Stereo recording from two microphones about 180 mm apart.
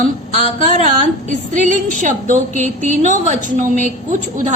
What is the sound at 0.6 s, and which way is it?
A woman's voice, 45° right (ahead or behind).